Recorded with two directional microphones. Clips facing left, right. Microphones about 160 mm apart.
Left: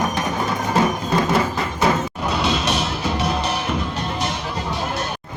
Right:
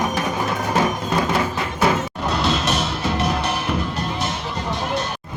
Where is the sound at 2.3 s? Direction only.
Centre (ahead or behind).